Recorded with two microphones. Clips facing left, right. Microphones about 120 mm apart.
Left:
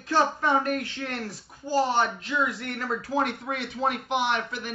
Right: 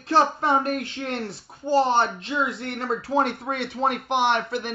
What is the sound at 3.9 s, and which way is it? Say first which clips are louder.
Speech: right 4 dB; 55° right (ahead or behind).